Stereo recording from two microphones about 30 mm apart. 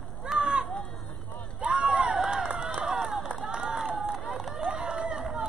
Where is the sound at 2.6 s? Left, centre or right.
Right.